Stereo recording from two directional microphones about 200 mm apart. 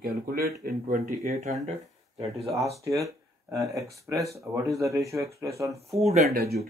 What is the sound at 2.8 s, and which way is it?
Speech, 15° right (ahead or behind).